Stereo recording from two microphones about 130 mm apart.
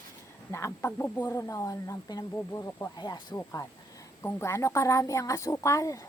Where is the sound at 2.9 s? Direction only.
35° left (ahead or behind).